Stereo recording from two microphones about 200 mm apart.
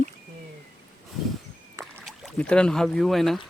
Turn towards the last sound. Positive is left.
turn(degrees=0)  # may be behind; listen again after turning